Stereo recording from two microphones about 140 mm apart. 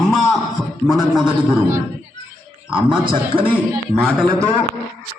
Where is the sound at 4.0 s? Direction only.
5° left (ahead or behind).